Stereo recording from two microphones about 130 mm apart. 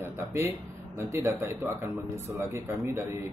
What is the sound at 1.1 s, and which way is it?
A man's voice, 20° right (ahead or behind).